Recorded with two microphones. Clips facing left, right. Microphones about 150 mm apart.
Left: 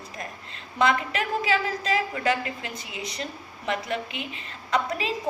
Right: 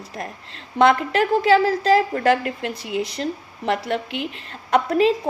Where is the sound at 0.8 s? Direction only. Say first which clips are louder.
Right 7 dB; 60° right (ahead or behind).